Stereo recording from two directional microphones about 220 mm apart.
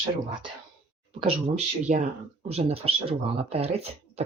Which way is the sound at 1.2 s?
30° right (ahead or behind).